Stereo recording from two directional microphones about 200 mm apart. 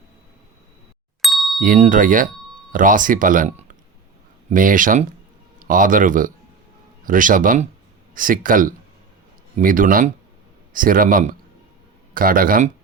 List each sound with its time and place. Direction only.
1.2 s ding: centre (ahead or behind)
1.6 s speech: 40° right (ahead or behind)